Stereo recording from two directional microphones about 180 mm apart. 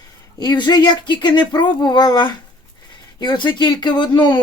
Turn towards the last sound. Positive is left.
turn(degrees=25)  # may be behind; listen again after turning